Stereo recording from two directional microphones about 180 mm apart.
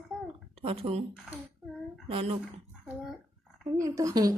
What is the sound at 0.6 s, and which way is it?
Speech, 30° right (ahead or behind).